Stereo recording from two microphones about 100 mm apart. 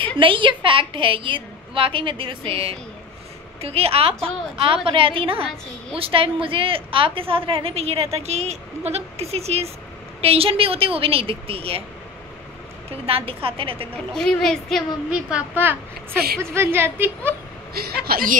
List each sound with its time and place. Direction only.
0.2 s a woman's voice: 55° right (ahead or behind); by 2.8 s 75° right (ahead or behind)
3.6 s a woman's voice: 85° right
10.2 s a woman's voice: 75° right (ahead or behind)
12.9 s a woman's voice: 70° right (ahead or behind)
13.9 s a woman's voice: 5° left (ahead or behind)
15.0 s a woman's voice: 10° right (ahead or behind)